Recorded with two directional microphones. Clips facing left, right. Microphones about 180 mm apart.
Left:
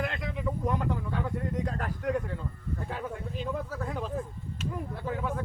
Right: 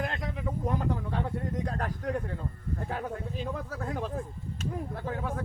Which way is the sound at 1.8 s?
40° right (ahead or behind).